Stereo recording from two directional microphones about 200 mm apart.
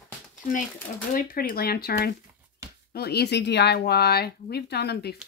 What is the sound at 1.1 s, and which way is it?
Speech, 45° left (ahead or behind).